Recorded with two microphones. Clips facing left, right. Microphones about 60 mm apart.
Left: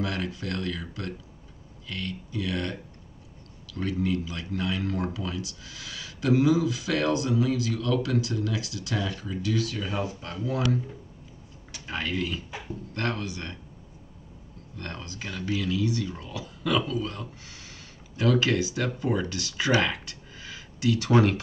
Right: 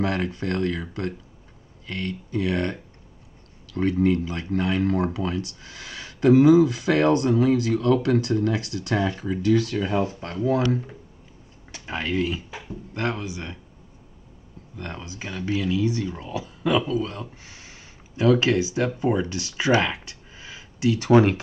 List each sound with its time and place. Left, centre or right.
0.0 s speech: right
9.4 s speech: right
11.8 s speech: right
14.8 s speech: centre